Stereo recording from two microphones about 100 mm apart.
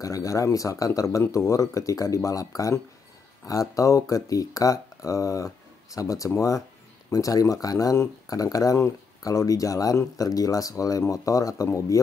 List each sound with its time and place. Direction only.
0.0 s speech: 35° left (ahead or behind)